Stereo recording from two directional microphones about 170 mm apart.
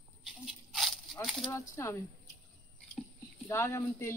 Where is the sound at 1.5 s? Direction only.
15° left (ahead or behind).